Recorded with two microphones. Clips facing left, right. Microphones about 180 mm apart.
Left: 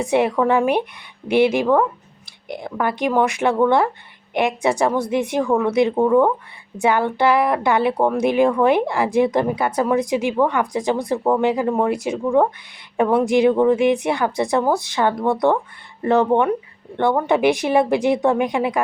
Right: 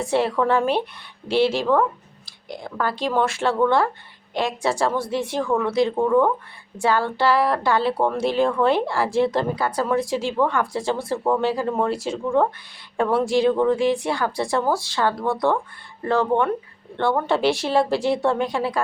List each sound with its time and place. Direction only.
0.0 s a woman's voice: 20° left (ahead or behind)